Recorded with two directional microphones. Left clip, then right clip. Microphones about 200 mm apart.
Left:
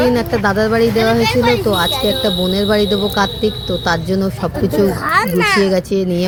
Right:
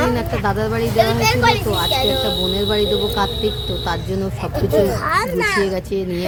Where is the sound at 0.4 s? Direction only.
25° left (ahead or behind).